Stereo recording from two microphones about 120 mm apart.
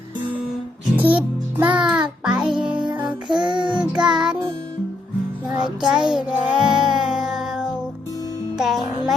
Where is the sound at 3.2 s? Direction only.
40° right (ahead or behind).